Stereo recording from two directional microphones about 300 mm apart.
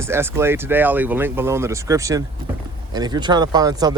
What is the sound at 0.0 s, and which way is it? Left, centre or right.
Speech, centre.